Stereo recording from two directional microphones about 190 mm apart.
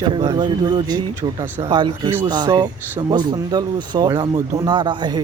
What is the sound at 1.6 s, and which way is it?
Speech, 25° right (ahead or behind).